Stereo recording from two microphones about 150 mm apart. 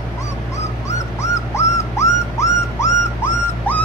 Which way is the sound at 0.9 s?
20° left (ahead or behind).